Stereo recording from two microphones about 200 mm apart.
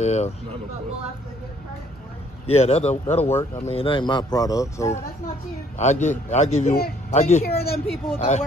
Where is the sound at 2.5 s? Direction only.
30° left (ahead or behind); by 5.0 s 15° left (ahead or behind).